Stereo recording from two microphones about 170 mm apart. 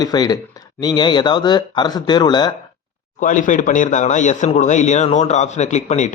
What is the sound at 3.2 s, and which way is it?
A man's voice, 50° left (ahead or behind).